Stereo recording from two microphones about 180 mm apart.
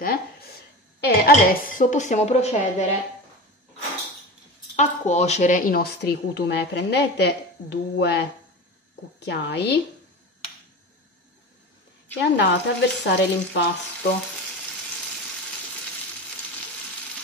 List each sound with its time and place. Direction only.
0.0 s a sound: 55° left (ahead or behind)
1.0 s a woman's voice: 60° left (ahead or behind); by 2.9 s 40° left (ahead or behind)
4.7 s speech: 40° left (ahead or behind); by 8.3 s 65° left (ahead or behind)
9.2 s frying: 70° left (ahead or behind)
12.2 s frying: 70° left (ahead or behind)